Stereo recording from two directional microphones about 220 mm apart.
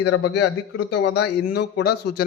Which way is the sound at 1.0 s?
50° left (ahead or behind).